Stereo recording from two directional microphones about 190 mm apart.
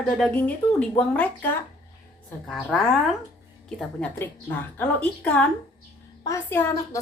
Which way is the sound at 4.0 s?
10° left (ahead or behind).